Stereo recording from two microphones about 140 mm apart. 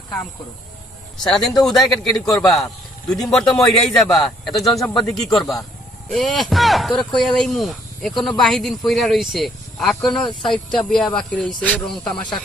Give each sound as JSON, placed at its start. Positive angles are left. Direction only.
{"t": 1.6, "sound": "speech", "side_deg": 0}